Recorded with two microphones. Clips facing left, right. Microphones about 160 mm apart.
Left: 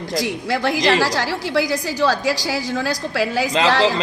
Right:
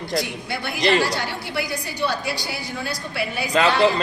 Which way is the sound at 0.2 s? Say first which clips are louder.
Left 6 dB; 90° left.